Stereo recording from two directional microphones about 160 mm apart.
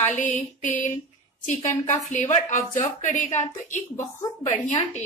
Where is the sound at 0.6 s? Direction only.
55° left (ahead or behind).